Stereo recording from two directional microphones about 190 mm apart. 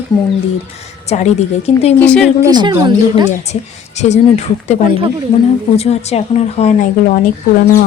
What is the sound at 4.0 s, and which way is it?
Speech, 35° left (ahead or behind).